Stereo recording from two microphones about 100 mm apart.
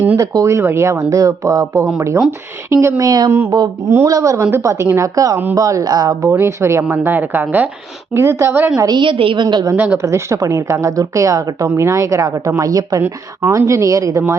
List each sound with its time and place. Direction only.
0.2 s a woman's voice: 30° right (ahead or behind)
6.2 s a woman's voice: 25° right (ahead or behind)
9.0 s a woman's voice: 60° right (ahead or behind)
9.7 s speech: 15° right (ahead or behind)
10.0 s a woman's voice: 30° right (ahead or behind)